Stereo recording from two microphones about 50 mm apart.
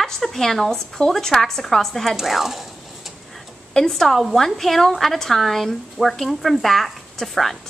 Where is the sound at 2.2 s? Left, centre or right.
Centre.